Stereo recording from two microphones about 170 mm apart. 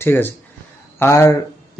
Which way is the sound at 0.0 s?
10° left (ahead or behind).